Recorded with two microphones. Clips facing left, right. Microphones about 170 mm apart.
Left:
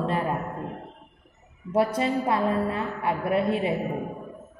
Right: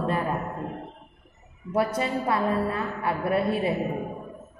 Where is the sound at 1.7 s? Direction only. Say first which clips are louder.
Left 2 dB; 25° left (ahead or behind).